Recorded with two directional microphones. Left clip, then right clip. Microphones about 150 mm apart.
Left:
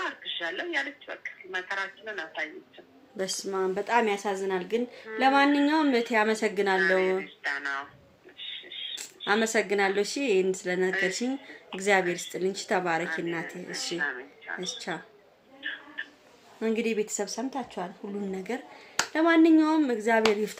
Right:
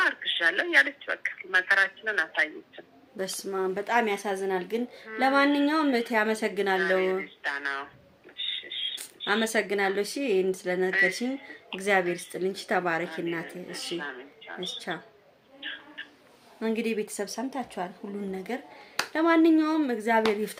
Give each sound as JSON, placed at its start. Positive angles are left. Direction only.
{"t": 0.0, "sound": "speech", "side_deg": -45}
{"t": 3.5, "sound": "speech", "side_deg": -5}
{"t": 6.8, "sound": "speech", "side_deg": -10}
{"t": 7.4, "sound": "speech", "side_deg": -25}
{"t": 8.4, "sound": "a sound", "side_deg": -30}
{"t": 9.0, "sound": "speech", "side_deg": 0}
{"t": 16.6, "sound": "speech", "side_deg": -5}